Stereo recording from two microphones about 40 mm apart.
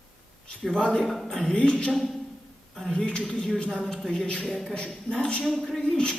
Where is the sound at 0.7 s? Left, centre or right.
Centre.